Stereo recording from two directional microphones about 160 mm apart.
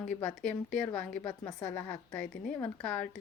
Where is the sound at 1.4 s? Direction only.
20° left (ahead or behind).